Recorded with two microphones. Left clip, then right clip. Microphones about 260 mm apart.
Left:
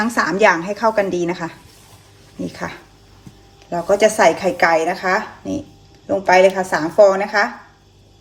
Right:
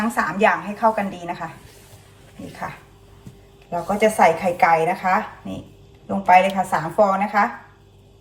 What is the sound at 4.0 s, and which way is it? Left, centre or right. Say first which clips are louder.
A woman's voice: left 1 dB; left.